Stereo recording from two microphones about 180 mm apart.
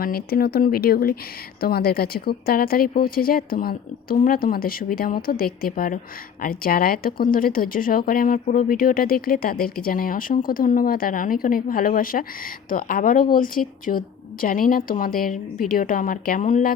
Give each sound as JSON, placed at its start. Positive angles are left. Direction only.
{"t": 0.0, "sound": "a woman's voice", "side_deg": 55}